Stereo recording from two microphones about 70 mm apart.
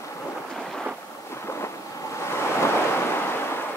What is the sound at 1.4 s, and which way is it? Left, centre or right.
Waves, left.